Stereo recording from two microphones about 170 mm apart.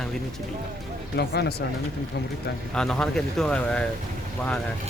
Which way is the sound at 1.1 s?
75° left (ahead or behind).